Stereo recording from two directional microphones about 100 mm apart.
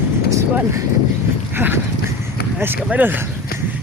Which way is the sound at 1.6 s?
20° right (ahead or behind).